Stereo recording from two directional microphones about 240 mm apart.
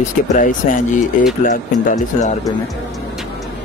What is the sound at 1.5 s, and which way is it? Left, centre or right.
Speech, left.